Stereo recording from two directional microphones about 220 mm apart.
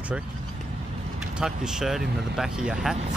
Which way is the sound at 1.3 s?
5° right (ahead or behind).